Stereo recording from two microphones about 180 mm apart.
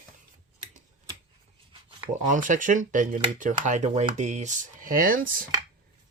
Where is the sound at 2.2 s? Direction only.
45° right (ahead or behind).